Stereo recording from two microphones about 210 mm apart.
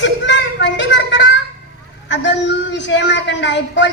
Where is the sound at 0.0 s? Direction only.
60° left (ahead or behind).